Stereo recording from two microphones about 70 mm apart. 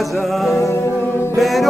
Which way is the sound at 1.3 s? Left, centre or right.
Centre.